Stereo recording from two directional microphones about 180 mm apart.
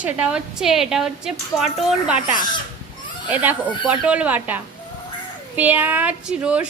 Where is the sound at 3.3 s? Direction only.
10° right (ahead or behind).